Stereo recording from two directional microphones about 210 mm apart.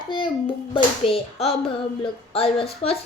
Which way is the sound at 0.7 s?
25° left (ahead or behind).